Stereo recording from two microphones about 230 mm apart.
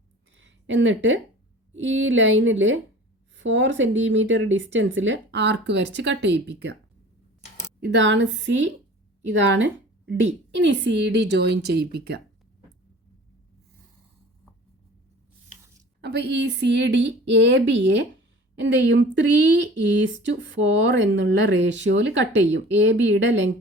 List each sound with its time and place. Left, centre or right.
0.3 s a sound: right
1.7 s speech: right
7.8 s speech: right
16.0 s speech: right